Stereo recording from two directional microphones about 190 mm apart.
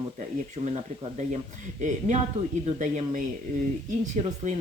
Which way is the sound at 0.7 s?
35° right (ahead or behind).